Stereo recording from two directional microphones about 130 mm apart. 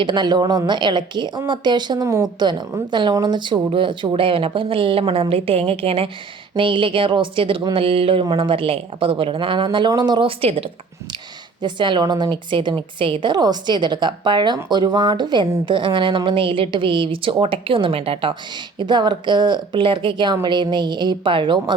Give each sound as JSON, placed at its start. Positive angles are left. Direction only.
{"t": 0.0, "sound": "a woman's voice", "side_deg": -35}
{"t": 2.0, "sound": "a woman's voice", "side_deg": -20}
{"t": 2.4, "sound": "a woman's voice", "side_deg": -35}